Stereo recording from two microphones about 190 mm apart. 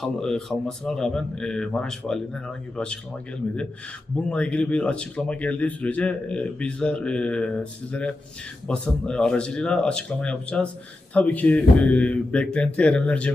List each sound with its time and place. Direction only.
0.0 s speech: centre (ahead or behind)
4.3 s speech: 5° left (ahead or behind)